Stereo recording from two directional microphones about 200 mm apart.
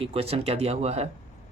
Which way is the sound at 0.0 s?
30° right (ahead or behind).